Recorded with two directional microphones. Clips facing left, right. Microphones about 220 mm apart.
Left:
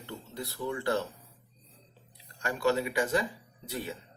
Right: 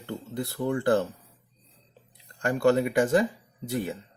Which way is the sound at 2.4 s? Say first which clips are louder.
Right 6 dB; 50° right (ahead or behind).